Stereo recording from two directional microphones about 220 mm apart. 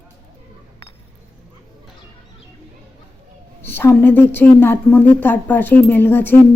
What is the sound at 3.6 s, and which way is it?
A woman's voice, 10° left (ahead or behind).